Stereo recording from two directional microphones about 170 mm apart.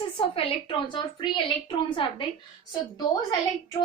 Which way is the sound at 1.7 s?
30° left (ahead or behind).